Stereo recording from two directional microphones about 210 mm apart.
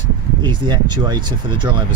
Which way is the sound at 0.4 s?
20° right (ahead or behind).